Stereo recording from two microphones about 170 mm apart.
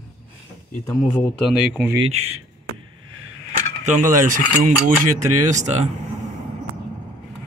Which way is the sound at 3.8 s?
50° right (ahead or behind).